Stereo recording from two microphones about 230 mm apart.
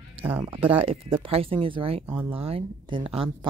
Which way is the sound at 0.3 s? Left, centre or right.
Right.